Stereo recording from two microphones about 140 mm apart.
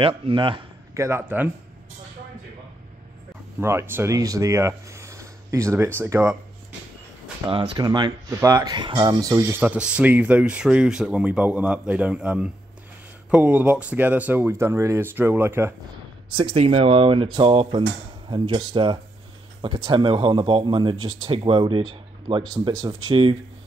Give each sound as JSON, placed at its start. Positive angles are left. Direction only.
{"t": 0.0, "sound": "speech", "side_deg": -35}
{"t": 0.9, "sound": "speech", "side_deg": -20}
{"t": 3.6, "sound": "speech", "side_deg": -15}
{"t": 7.5, "sound": "speech", "side_deg": -30}
{"t": 9.6, "sound": "speech", "side_deg": -10}
{"t": 16.3, "sound": "speech", "side_deg": -40}